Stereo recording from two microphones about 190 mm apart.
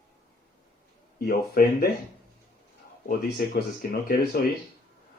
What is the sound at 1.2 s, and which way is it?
Speech, 50° left (ahead or behind).